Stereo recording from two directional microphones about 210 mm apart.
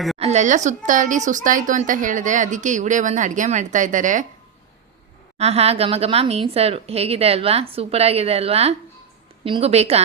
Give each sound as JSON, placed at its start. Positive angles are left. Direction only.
{"t": 0.2, "sound": "a woman's voice", "side_deg": -30}
{"t": 5.4, "sound": "speech", "side_deg": -30}